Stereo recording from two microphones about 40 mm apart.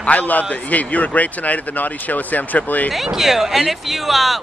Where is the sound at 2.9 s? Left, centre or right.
Centre.